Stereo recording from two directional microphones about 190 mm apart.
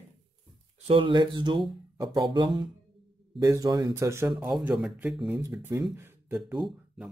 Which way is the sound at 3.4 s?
15° right (ahead or behind).